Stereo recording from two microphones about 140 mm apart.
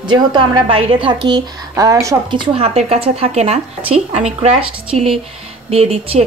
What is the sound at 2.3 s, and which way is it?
Speech, 40° right (ahead or behind).